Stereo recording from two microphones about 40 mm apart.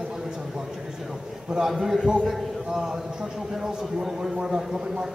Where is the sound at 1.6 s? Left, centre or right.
Centre.